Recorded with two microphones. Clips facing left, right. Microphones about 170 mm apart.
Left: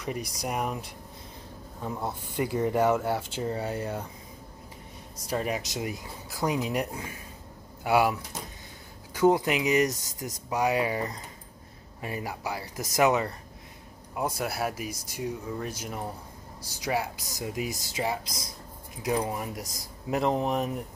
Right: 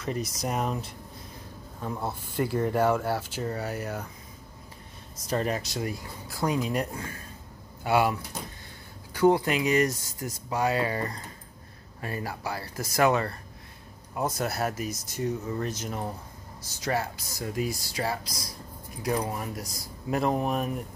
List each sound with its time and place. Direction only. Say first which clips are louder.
0.0 s speech: right 2 dB; 15° left (ahead or behind)
2.3 s speech: even; 15° left (ahead or behind)
5.2 s speech: right 2 dB; 10° left (ahead or behind)